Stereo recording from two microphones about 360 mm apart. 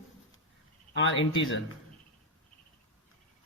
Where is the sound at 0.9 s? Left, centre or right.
Left.